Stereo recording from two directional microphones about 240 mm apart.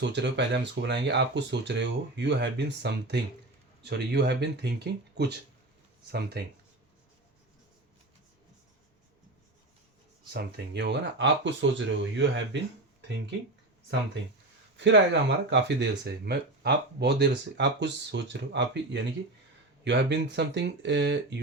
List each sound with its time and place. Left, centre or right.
0.0 s speech: right
10.3 s speech: right
14.8 s speech: right